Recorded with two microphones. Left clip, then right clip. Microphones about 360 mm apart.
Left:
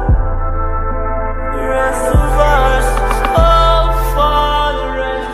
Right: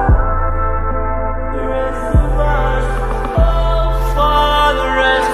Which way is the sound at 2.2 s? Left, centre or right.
Left.